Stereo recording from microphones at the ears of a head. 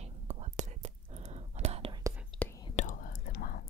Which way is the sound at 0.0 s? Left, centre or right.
Right.